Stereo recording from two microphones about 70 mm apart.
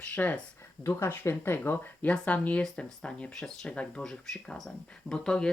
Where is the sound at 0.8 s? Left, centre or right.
Left.